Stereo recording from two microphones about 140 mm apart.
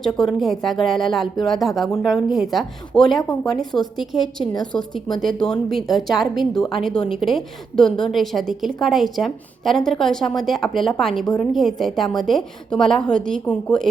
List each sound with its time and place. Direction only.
0.2 s a woman's voice: centre (ahead or behind)